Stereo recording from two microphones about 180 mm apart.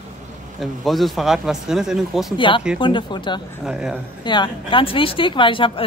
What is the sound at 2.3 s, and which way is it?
A woman's voice, 25° left (ahead or behind).